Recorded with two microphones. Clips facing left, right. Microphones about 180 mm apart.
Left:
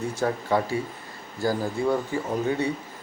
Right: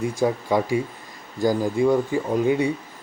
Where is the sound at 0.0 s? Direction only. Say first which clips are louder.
Right 4 dB; 10° right (ahead or behind).